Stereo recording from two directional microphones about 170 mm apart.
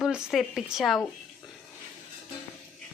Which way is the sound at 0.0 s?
5° right (ahead or behind).